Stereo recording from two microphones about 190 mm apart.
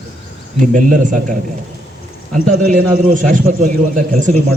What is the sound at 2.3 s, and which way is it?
A man's voice, 40° right (ahead or behind).